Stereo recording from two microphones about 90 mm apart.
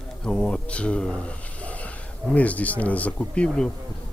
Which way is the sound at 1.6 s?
15° left (ahead or behind).